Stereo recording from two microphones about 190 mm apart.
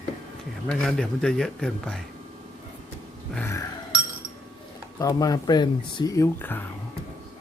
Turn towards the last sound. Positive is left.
turn(degrees=10)  # may be behind; listen again after turning